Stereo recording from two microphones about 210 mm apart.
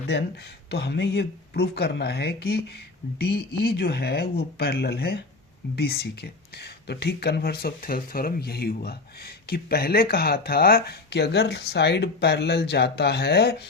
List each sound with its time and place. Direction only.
0.1 s speech: 50° left (ahead or behind)